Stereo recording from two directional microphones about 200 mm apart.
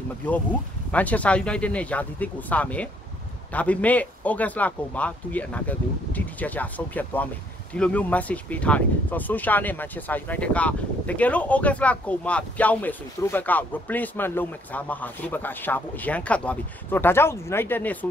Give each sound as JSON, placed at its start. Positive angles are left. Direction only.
{"t": 0.9, "sound": "speech", "side_deg": 5}